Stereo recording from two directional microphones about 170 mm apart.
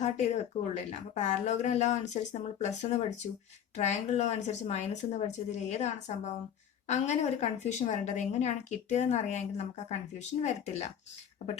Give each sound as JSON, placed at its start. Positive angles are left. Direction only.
{"t": 0.0, "sound": "a woman's voice", "side_deg": 45}